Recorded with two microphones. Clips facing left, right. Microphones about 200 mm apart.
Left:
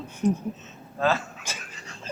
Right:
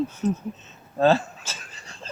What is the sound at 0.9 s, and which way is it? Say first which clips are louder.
Speech: right 6 dB; 35° right (ahead or behind).